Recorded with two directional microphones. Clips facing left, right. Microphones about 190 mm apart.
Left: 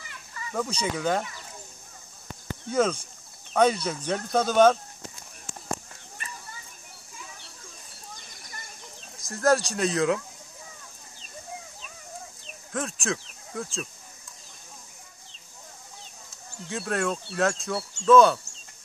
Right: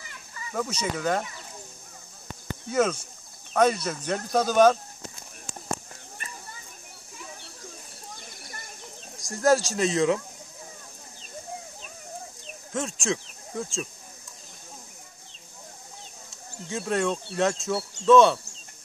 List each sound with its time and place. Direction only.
0.5 s speech: 5° right (ahead or behind)
2.7 s speech: 5° right (ahead or behind)
9.1 s speech: centre (ahead or behind)
12.7 s speech: centre (ahead or behind)
16.6 s speech: 15° right (ahead or behind)
16.9 s speech: centre (ahead or behind)